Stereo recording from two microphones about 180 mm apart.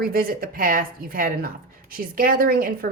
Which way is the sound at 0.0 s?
55° right (ahead or behind).